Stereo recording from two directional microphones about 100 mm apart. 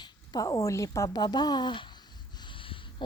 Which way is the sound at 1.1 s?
45° left (ahead or behind).